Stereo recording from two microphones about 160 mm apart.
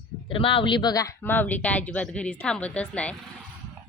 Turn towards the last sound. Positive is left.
turn(degrees=10)  # may be behind; listen again after turning